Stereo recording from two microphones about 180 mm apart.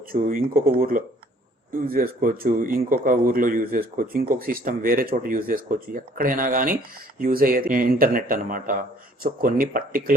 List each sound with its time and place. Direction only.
0.1 s speech: 50° right (ahead or behind)